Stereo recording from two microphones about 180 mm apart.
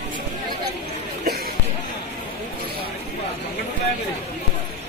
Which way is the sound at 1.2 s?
55° right (ahead or behind).